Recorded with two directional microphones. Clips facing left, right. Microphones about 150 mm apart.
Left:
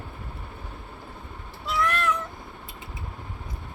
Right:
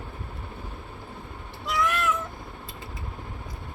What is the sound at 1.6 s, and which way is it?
Cat, centre (ahead or behind).